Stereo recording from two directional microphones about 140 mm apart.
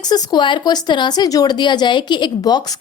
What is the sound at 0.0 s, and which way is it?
Speech, 30° left (ahead or behind).